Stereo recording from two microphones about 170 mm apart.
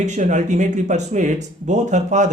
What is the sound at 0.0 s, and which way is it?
Speech, 45° right (ahead or behind).